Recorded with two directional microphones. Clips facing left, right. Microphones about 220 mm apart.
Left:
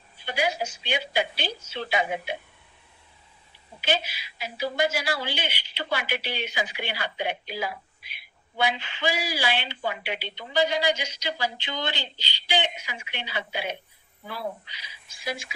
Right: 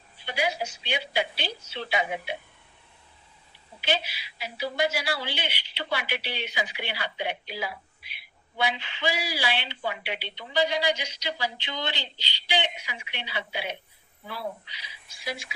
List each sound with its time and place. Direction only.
0.3 s a woman's voice: 45° left (ahead or behind)
3.8 s a woman's voice: 45° left (ahead or behind)